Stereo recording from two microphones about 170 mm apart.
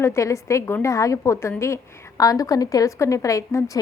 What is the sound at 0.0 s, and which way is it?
A woman's voice, 15° left (ahead or behind).